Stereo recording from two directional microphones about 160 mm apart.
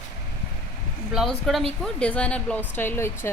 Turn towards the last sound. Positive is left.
turn(degrees=15)  # may be behind; listen again after turning